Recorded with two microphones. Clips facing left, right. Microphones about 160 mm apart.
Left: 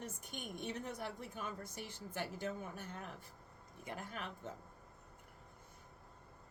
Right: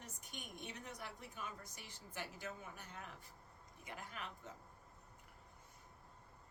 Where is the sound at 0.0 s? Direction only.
55° left (ahead or behind).